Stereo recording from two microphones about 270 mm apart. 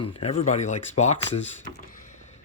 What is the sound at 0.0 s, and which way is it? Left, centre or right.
A man's voice, left.